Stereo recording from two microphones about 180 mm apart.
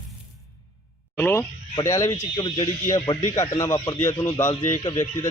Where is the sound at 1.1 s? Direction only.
10° left (ahead or behind).